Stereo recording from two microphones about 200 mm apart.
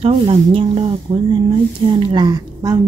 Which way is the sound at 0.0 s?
30° right (ahead or behind).